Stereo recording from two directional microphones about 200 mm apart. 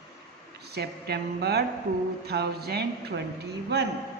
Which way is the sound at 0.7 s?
55° right (ahead or behind).